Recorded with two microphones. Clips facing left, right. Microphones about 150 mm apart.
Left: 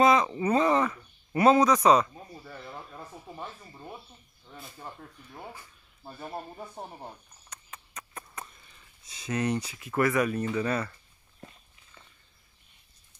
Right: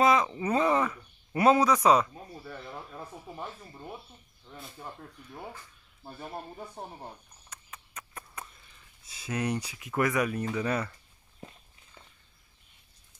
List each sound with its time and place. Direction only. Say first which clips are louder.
0.0 s speech: left 2 dB; centre (ahead or behind)
5.5 s a sound: even; 10° left (ahead or behind); by 8.5 s 5° right (ahead or behind)
9.0 s speech: left 2 dB; 5° right (ahead or behind)